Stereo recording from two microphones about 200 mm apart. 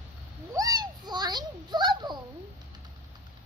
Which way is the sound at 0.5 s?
20° right (ahead or behind).